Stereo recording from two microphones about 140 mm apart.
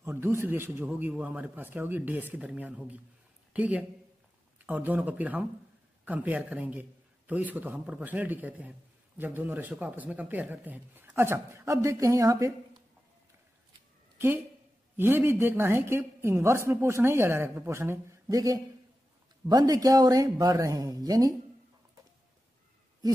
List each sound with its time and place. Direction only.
0.0 s a woman's voice: 15° right (ahead or behind)
14.1 s a woman's voice: 15° right (ahead or behind)